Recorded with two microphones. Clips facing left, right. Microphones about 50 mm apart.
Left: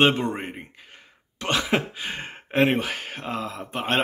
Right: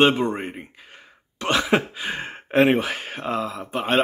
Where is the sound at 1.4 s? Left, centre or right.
Centre.